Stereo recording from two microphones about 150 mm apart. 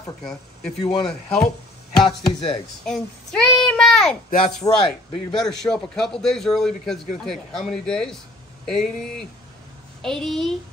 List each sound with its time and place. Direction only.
0.2 s a man's voice: 5° left (ahead or behind)
2.0 s speech: 40° left (ahead or behind)
2.8 s a child's voice: 5° left (ahead or behind)
4.6 s speech: 30° left (ahead or behind)
5.3 s a man's voice: 5° left (ahead or behind)
10.0 s a man's voice: 5° left (ahead or behind)